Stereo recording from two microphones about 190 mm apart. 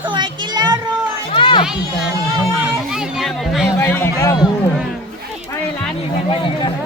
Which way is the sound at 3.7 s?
15° left (ahead or behind).